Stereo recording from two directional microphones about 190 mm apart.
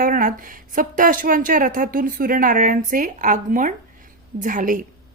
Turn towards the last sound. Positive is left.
turn(degrees=-45)  # may be behind; listen again after turning